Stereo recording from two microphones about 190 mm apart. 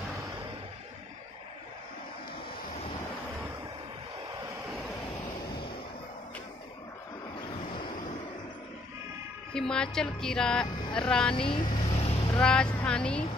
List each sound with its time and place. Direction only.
9.5 s speech: 5° left (ahead or behind)
11.3 s speech: 25° left (ahead or behind)
11.7 s vehicle: 35° left (ahead or behind)
12.4 s speech: 5° left (ahead or behind)